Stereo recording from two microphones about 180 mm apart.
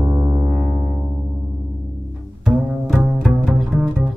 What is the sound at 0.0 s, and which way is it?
Music, 10° right (ahead or behind).